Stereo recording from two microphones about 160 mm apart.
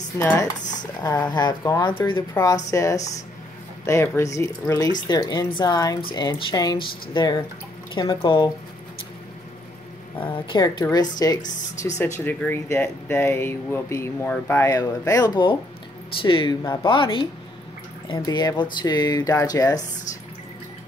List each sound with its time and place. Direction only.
0.2 s speech: 15° left (ahead or behind)
10.2 s speech: 35° left (ahead or behind)
12.0 s speech: 10° left (ahead or behind)
14.7 s speech: 25° left (ahead or behind)